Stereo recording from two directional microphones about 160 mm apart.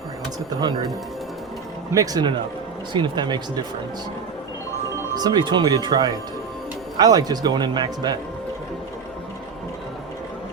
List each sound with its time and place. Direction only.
1.9 s speech: 20° right (ahead or behind)
5.1 s speech: 25° right (ahead or behind)